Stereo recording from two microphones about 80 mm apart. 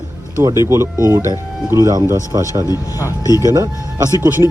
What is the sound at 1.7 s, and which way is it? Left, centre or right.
Speech, right.